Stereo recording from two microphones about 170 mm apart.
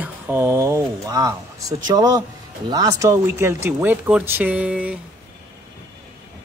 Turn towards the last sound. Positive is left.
turn(degrees=-10)  # may be behind; listen again after turning